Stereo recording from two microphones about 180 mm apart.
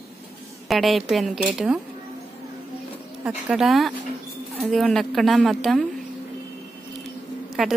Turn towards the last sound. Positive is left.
turn(degrees=0)  # may be behind; listen again after turning